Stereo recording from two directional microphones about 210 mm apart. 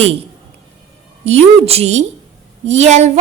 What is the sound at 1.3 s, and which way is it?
A woman's voice, 30° right (ahead or behind).